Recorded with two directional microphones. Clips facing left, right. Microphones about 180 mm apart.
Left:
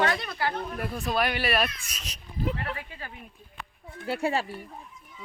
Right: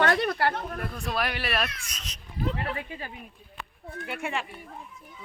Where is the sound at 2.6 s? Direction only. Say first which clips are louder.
Right 3 dB; 25° right (ahead or behind).